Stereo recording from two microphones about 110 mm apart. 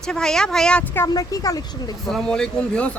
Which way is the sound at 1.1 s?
35° left (ahead or behind).